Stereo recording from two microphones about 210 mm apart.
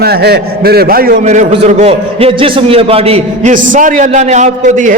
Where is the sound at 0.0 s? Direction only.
50° right (ahead or behind).